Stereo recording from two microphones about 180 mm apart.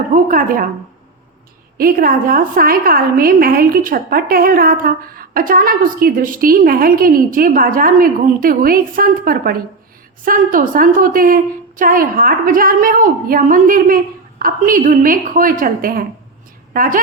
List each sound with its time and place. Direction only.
0.1 s a woman's voice: 50° right (ahead or behind)
1.8 s a woman's voice: 50° right (ahead or behind)